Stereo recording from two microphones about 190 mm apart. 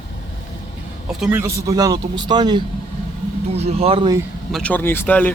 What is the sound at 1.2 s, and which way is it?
Speech, 10° right (ahead or behind).